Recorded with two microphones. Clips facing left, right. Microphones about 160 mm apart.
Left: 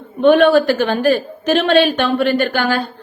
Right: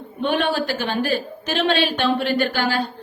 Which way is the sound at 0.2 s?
55° left (ahead or behind).